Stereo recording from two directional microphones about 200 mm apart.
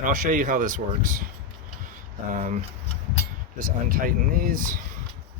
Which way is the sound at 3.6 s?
45° right (ahead or behind).